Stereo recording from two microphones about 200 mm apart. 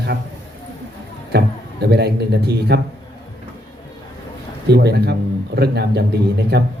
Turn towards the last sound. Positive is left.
turn(degrees=-55)  # may be behind; listen again after turning